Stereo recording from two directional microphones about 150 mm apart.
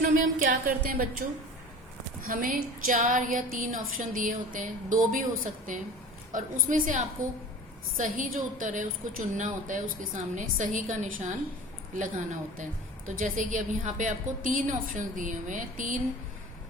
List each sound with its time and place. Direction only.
0.0 s a woman's voice: 65° right (ahead or behind)
2.2 s a woman's voice: 65° right (ahead or behind)